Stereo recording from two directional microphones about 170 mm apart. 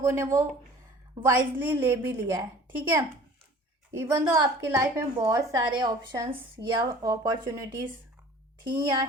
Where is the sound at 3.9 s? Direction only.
15° right (ahead or behind).